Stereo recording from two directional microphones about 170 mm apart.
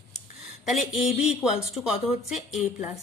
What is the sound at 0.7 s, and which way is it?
Speech, centre (ahead or behind).